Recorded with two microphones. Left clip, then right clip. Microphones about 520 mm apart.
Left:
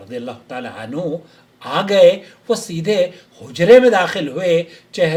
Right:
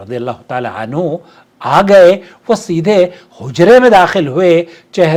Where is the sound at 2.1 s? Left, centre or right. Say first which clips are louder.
Right 6 dB; right.